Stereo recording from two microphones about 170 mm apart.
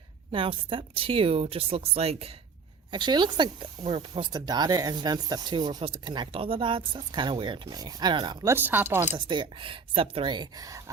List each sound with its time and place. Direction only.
0.3 s speech: 30° right (ahead or behind)
8.5 s speech: 10° right (ahead or behind)
9.1 s speech: 25° right (ahead or behind)